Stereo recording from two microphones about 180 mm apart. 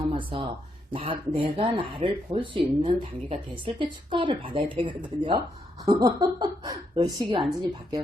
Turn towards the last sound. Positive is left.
turn(degrees=-20)  # may be behind; listen again after turning